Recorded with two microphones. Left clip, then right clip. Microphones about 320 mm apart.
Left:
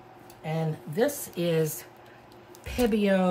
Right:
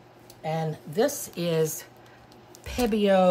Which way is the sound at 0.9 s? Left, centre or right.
Centre.